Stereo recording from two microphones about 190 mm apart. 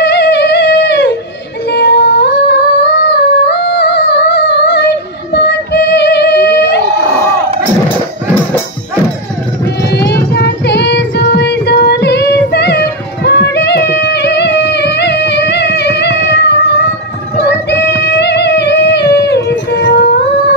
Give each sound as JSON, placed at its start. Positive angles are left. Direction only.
{"t": 0.0, "sound": "a sound", "side_deg": 60}
{"t": 1.7, "sound": "humming", "side_deg": 60}
{"t": 9.8, "sound": "child singing", "side_deg": 60}
{"t": 13.7, "sound": "music", "side_deg": 60}